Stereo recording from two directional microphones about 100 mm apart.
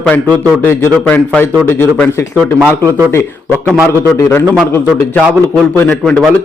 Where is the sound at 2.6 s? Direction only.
25° right (ahead or behind).